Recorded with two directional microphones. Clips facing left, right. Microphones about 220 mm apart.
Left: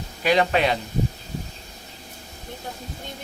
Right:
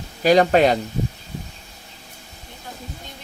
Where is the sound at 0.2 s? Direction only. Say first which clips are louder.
Right 6 dB; 40° right (ahead or behind).